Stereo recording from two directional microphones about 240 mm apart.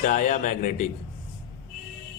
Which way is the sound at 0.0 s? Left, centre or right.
Left.